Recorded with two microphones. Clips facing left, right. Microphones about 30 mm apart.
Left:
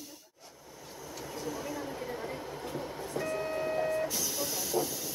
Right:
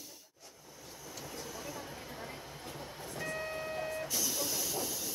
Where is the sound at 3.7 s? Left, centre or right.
Left.